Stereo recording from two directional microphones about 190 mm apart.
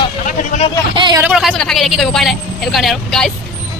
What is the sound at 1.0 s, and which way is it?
Speech, 25° right (ahead or behind).